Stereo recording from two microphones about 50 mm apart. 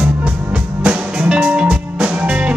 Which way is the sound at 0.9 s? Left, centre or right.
Right.